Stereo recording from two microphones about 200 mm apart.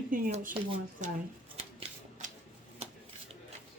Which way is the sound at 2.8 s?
35° right (ahead or behind).